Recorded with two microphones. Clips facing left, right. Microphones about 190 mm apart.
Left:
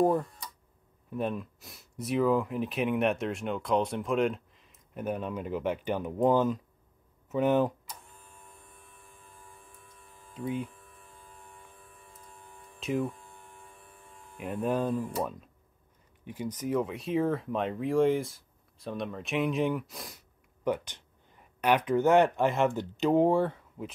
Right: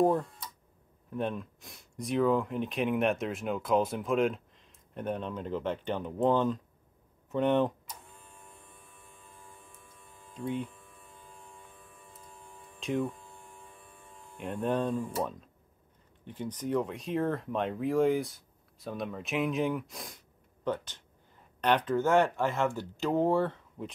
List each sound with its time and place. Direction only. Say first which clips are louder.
0.0 s tick-tock: even; centre (ahead or behind)
1.1 s speech: left 1 dB; 5° left (ahead or behind)
8.5 s a sound: even; centre (ahead or behind)
12.0 s music: right 1 dB; centre (ahead or behind)
14.3 s speech: left 1 dB; 5° left (ahead or behind)
20.6 s speech: left 3 dB; 15° left (ahead or behind)
23.8 s speech: even; 5° left (ahead or behind)